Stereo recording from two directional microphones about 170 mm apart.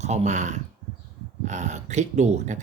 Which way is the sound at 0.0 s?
40° right (ahead or behind).